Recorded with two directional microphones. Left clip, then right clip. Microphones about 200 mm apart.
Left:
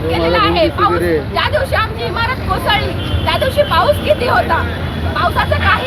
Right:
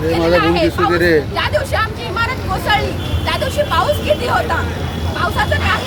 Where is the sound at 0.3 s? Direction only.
5° right (ahead or behind).